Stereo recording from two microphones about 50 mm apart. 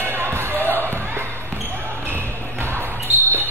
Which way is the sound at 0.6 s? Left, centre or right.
Left.